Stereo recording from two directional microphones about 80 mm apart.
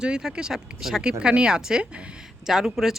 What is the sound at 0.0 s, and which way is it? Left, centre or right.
A man's voice, centre.